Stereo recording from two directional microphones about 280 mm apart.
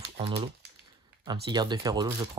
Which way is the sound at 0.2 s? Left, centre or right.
Right.